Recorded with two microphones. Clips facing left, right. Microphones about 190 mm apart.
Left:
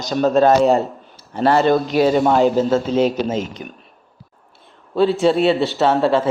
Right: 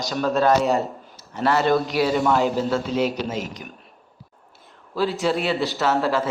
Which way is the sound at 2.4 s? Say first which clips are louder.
Left 6 dB; 20° left (ahead or behind).